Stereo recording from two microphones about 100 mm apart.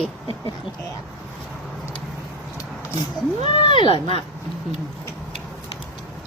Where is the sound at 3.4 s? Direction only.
55° left (ahead or behind).